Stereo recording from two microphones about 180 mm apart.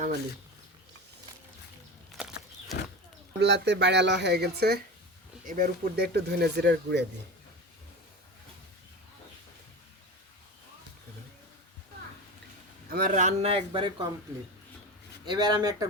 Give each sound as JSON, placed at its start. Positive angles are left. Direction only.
{"t": 3.4, "sound": "speech", "side_deg": -70}
{"t": 5.5, "sound": "speech", "side_deg": -50}
{"t": 12.9, "sound": "a man's voice", "side_deg": -50}
{"t": 15.3, "sound": "speech", "side_deg": -25}